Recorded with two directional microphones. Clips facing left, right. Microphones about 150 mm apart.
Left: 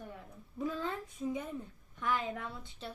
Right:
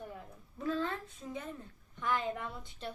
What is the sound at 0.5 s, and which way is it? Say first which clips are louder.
Speech: right 1 dB; 15° left (ahead or behind).